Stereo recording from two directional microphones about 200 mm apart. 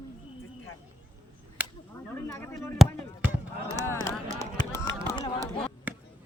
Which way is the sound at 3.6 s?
15° left (ahead or behind).